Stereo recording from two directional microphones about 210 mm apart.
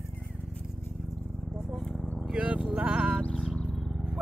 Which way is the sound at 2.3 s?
5° right (ahead or behind).